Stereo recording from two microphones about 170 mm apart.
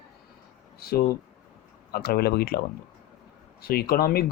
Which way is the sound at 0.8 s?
65° left (ahead or behind).